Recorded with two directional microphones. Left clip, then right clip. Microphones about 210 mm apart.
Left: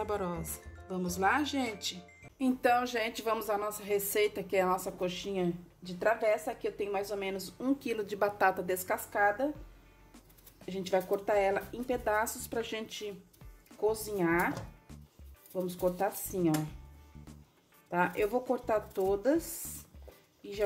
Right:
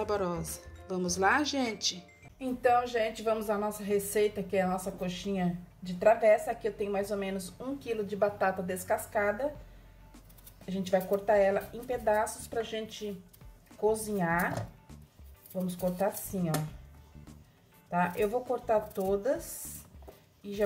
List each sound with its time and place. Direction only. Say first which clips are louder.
0.0 s speech: right 3 dB; 5° right (ahead or behind)
2.3 s speech: right 1 dB; 50° left (ahead or behind)
10.7 s speech: right 2 dB; 35° left (ahead or behind)
16.0 s speech: even; 40° left (ahead or behind)
17.9 s speech: right 1 dB; 40° left (ahead or behind)